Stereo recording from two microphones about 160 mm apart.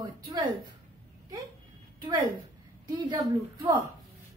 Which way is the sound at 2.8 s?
25° right (ahead or behind).